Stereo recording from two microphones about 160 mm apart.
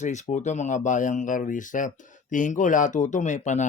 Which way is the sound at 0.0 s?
50° left (ahead or behind).